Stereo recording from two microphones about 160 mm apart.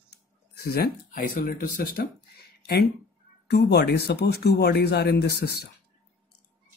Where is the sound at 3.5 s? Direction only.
90° left.